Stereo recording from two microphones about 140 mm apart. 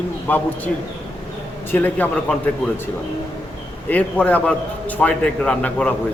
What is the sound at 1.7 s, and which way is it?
Speech, 10° left (ahead or behind).